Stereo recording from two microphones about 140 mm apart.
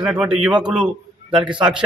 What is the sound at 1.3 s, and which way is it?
Speech, 35° right (ahead or behind).